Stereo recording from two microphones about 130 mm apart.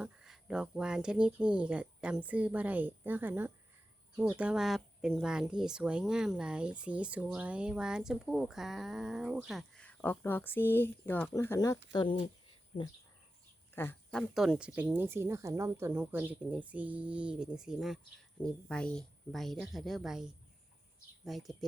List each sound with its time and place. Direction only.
0.0 s speech: 5° right (ahead or behind)
9.8 s speech: 15° left (ahead or behind)
12.0 s speech: 45° left (ahead or behind)
13.7 s a sound: 15° left (ahead or behind)
14.2 s speech: centre (ahead or behind)